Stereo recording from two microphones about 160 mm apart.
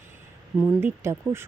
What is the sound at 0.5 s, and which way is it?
Speech, 15° right (ahead or behind).